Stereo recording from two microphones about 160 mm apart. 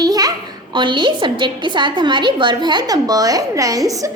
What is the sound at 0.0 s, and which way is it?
A child's voice, 25° right (ahead or behind).